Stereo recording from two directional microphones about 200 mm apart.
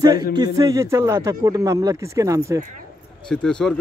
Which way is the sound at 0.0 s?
20° right (ahead or behind).